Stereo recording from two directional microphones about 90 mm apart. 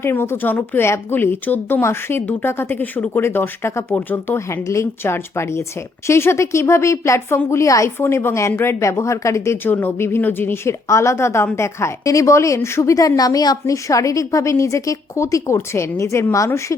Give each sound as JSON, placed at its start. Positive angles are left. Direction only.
{"t": 0.0, "sound": "a woman's voice", "side_deg": 25}
{"t": 9.6, "sound": "a woman's voice", "side_deg": 20}